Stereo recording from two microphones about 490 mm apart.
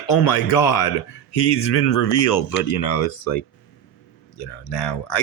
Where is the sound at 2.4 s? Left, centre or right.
Left.